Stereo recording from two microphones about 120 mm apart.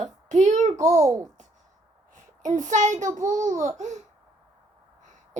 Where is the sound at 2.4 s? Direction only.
90° right; by 4.0 s 75° right (ahead or behind).